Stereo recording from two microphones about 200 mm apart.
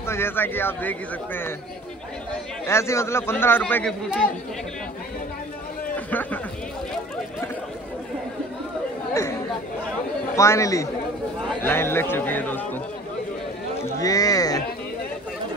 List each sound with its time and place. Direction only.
0.0 s speech: 10° left (ahead or behind)
2.6 s speech: 15° left (ahead or behind)
5.9 s a man's voice: 10° left (ahead or behind)
10.3 s speech: 15° left (ahead or behind)
14.0 s speech: 20° left (ahead or behind)